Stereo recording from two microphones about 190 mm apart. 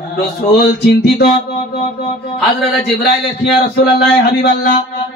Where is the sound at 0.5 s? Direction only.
60° left (ahead or behind).